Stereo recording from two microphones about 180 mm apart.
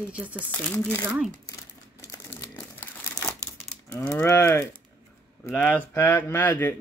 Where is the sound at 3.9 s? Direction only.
10° left (ahead or behind).